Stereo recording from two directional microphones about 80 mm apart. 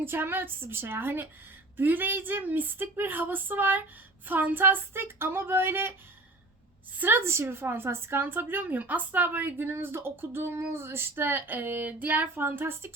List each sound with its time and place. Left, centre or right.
0.0 s a woman's voice: right
7.0 s a woman's voice: right